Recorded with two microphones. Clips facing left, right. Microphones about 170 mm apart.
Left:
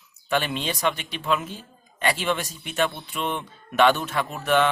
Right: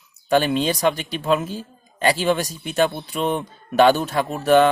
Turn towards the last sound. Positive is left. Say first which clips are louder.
# right 6 dB
turn(degrees=-40)  # may be behind; listen again after turning